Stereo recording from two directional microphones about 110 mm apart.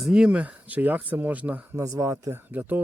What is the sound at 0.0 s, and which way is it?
Speech, 5° right (ahead or behind).